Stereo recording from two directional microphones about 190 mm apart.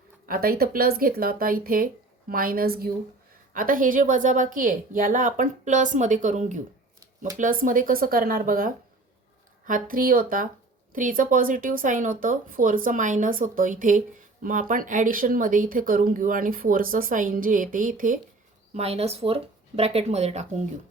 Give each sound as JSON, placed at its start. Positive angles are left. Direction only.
{"t": 0.3, "sound": "speech", "side_deg": -50}
{"t": 18.7, "sound": "speech", "side_deg": -35}